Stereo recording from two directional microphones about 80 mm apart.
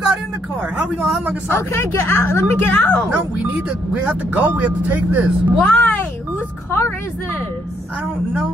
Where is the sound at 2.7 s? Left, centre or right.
Centre.